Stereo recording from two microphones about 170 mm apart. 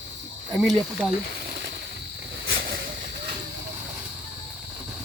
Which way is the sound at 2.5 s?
60° right (ahead or behind).